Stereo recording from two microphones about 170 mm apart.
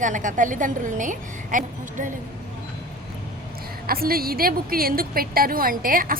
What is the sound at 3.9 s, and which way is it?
A woman's voice, 60° right (ahead or behind).